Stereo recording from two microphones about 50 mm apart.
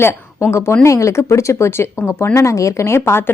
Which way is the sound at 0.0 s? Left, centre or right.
Left.